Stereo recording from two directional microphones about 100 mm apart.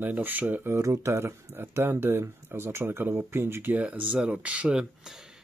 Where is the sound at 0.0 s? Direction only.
20° right (ahead or behind).